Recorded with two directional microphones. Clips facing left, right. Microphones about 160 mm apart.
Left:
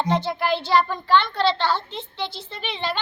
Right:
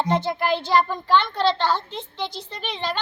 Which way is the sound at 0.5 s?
45° right (ahead or behind).